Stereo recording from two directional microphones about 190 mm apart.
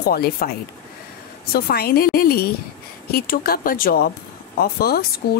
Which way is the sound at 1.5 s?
55° left (ahead or behind).